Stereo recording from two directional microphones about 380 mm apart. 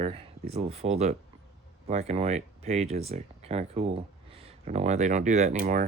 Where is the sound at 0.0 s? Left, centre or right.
Centre.